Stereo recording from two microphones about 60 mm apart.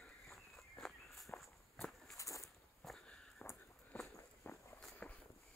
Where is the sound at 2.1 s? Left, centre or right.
Left.